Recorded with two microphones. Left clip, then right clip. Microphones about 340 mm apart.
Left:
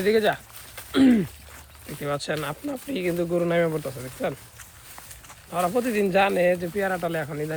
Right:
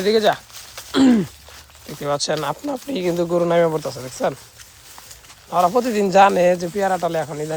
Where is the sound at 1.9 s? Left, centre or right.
Centre.